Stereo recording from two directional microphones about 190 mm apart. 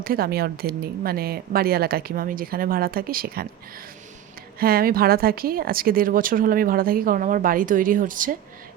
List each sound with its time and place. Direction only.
0.0 s speech: 50° right (ahead or behind)
4.6 s speech: 50° right (ahead or behind)